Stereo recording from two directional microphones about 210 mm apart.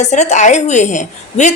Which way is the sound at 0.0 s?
35° left (ahead or behind).